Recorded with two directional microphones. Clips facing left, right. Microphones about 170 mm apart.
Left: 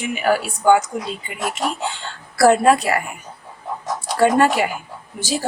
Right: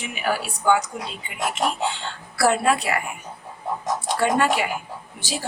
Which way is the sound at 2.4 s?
45° left (ahead or behind).